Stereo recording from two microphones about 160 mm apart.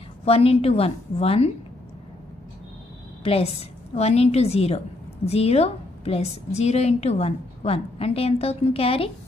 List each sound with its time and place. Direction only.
0.2 s a woman's voice: 40° left (ahead or behind)
3.3 s a woman's voice: 40° left (ahead or behind)